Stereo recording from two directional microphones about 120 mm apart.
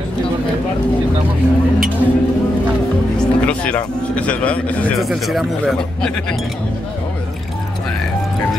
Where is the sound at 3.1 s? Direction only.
10° left (ahead or behind).